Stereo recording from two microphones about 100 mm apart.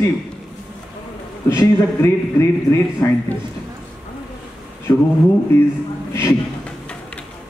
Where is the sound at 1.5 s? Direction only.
30° left (ahead or behind).